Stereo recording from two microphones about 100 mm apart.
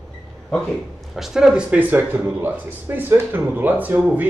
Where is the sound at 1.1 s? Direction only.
5° right (ahead or behind).